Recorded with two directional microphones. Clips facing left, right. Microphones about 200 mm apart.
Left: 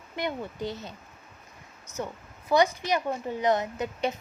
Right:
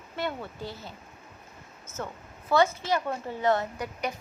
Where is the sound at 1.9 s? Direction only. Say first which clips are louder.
Left 2 dB; 15° left (ahead or behind).